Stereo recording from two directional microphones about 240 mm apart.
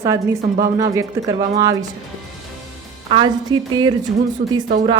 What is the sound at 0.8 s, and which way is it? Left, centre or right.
Speech, centre.